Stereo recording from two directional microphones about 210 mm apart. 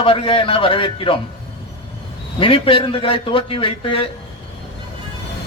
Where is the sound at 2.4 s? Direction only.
25° left (ahead or behind).